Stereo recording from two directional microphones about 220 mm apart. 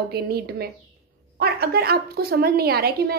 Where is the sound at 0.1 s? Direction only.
45° right (ahead or behind).